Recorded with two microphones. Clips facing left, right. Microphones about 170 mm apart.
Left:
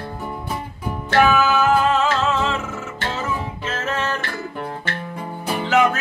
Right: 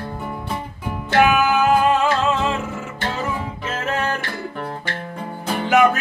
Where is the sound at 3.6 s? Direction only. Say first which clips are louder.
Right 3 dB; 15° right (ahead or behind).